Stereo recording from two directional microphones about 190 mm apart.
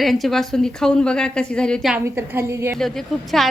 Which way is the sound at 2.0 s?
15° right (ahead or behind).